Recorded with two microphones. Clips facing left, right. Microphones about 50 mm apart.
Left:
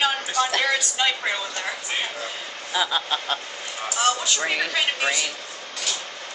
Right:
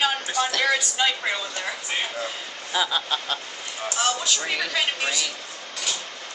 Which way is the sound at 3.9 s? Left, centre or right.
Centre.